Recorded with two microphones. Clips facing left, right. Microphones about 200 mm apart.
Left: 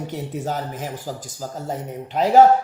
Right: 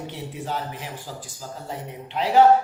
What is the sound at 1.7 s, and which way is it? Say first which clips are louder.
Speech: left 4 dB; 45° left (ahead or behind).